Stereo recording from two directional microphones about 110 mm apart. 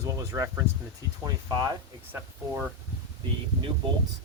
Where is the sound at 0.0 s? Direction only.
30° right (ahead or behind).